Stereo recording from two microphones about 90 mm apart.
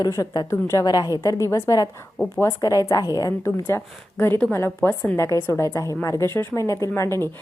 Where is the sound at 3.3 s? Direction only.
25° left (ahead or behind).